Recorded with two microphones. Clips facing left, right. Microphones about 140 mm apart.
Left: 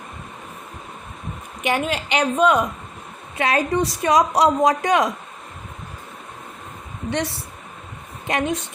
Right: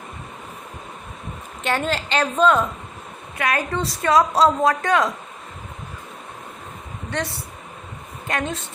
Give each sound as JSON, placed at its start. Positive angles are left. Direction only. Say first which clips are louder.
{"t": 1.6, "sound": "a woman's voice", "louder": "left 1 dB", "side_deg": 10}
{"t": 3.3, "sound": "a woman's voice", "louder": "left 3 dB", "side_deg": 25}
{"t": 8.3, "sound": "a woman's voice", "louder": "left 3 dB", "side_deg": 20}